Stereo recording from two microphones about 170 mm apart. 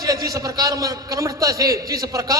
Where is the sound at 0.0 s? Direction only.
20° right (ahead or behind).